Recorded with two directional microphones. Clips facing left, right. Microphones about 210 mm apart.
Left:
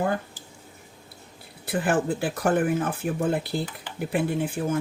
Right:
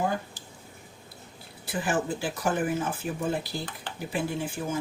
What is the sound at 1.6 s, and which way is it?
Speech, 60° left (ahead or behind).